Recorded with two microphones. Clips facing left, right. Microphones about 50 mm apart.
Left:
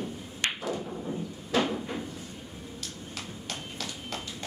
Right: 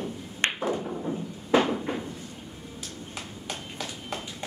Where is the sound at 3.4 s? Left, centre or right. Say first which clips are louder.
Right 3 dB; centre.